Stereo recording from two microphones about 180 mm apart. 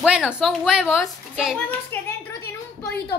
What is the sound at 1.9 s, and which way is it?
Speech, 15° left (ahead or behind).